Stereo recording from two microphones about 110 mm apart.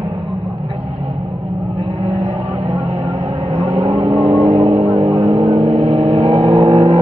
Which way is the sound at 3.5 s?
65° right (ahead or behind).